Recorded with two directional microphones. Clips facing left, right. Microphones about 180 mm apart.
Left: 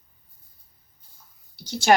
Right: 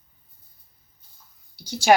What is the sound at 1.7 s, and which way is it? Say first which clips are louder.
Speech: right 1 dB; 15° right (ahead or behind).